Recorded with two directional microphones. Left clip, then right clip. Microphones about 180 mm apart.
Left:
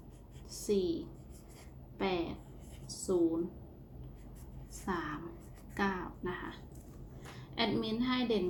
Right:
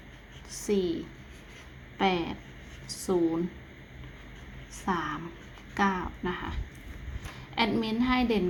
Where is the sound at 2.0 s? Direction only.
20° right (ahead or behind).